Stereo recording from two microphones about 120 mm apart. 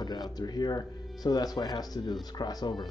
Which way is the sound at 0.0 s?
35° left (ahead or behind).